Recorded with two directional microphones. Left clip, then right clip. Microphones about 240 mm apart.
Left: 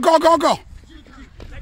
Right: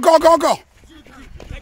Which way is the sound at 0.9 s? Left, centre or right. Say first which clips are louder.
Right 2 dB; right.